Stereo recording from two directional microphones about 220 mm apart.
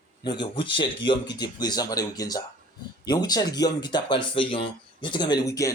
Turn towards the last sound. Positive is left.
turn(degrees=15)  # may be behind; listen again after turning